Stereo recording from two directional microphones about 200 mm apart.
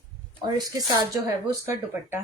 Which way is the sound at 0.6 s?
20° right (ahead or behind).